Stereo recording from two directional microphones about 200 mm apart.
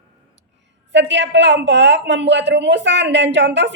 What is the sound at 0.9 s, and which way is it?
A woman's voice, 60° right (ahead or behind).